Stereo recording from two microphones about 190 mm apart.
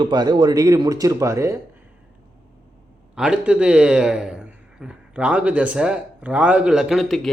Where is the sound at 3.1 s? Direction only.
5° right (ahead or behind).